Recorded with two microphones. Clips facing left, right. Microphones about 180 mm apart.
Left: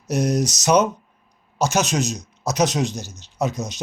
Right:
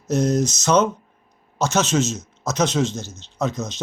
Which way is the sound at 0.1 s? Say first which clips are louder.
Right 1 dB; 15° left (ahead or behind).